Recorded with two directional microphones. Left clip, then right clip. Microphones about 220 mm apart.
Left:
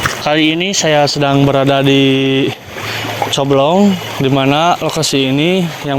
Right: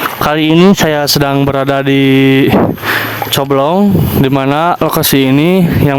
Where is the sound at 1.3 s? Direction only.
30° right (ahead or behind).